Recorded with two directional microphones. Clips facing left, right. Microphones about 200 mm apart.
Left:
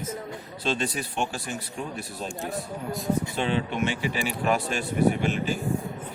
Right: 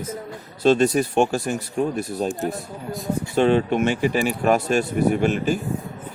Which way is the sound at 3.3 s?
45° right (ahead or behind).